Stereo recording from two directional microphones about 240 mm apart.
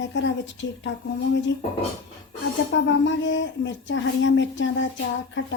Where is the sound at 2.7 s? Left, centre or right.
Left.